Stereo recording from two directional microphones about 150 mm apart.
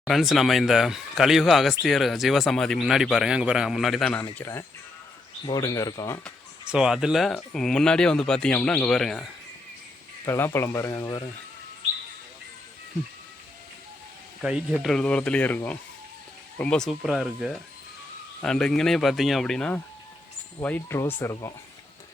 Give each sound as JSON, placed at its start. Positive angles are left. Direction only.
{"t": 0.0, "sound": "speech", "side_deg": 0}
{"t": 5.5, "sound": "speech", "side_deg": 25}
{"t": 6.7, "sound": "speech", "side_deg": -5}
{"t": 10.2, "sound": "speech", "side_deg": 15}
{"t": 14.4, "sound": "speech", "side_deg": -5}